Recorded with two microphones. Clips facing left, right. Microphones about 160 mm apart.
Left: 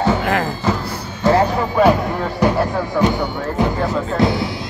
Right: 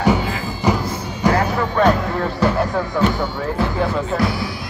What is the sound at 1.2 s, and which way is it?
Music, 15° right (ahead or behind).